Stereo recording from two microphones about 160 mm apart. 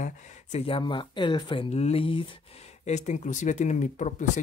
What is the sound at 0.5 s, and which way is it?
Speech, 35° left (ahead or behind).